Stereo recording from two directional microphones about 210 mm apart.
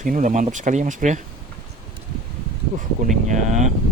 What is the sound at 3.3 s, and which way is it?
Speech, 35° right (ahead or behind).